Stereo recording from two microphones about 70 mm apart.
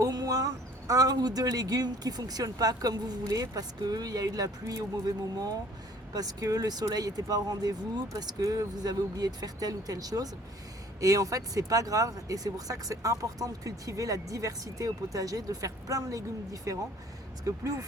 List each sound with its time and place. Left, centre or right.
0.0 s speech: right